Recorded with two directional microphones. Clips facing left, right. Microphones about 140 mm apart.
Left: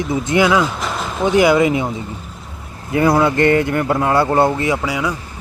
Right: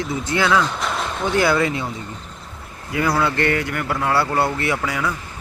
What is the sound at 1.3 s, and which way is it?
Speech, 15° left (ahead or behind).